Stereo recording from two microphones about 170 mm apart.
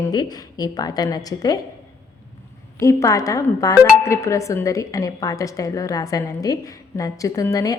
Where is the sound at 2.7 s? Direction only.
20° left (ahead or behind).